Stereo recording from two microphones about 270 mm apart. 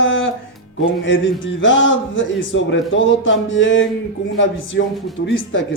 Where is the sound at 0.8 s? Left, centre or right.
Left.